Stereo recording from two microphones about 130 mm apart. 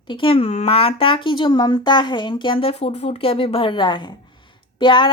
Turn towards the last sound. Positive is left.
turn(degrees=40)  # may be behind; listen again after turning